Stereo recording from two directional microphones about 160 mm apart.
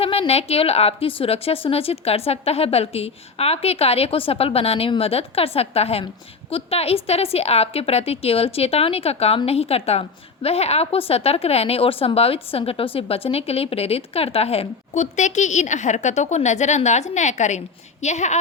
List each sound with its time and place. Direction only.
0.0 s a woman's voice: 35° left (ahead or behind)